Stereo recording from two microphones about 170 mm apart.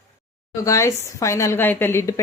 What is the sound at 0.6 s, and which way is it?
A woman's voice, 20° left (ahead or behind).